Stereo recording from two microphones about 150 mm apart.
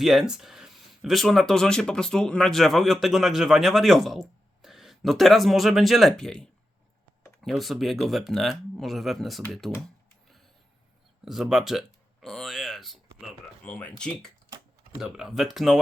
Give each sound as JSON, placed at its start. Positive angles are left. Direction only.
{"t": 0.0, "sound": "speech", "side_deg": -5}
{"t": 11.3, "sound": "a sound", "side_deg": 0}
{"t": 13.7, "sound": "speech", "side_deg": 5}
{"t": 14.9, "sound": "speech", "side_deg": -5}